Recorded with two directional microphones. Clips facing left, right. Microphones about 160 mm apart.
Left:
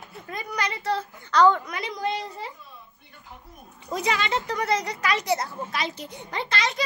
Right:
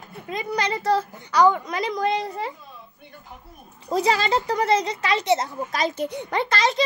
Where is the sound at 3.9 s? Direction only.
35° right (ahead or behind).